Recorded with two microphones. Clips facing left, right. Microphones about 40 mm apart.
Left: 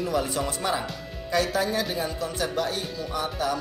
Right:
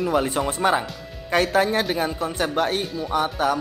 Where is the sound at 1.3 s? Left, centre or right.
Right.